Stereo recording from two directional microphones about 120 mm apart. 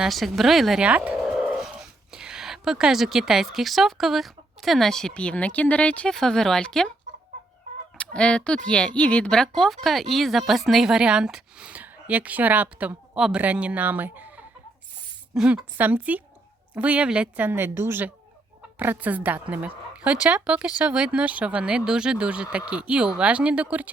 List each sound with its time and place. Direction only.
0.0 s speech: centre (ahead or behind)
7.9 s speech: 10° left (ahead or behind); by 23.9 s 10° right (ahead or behind)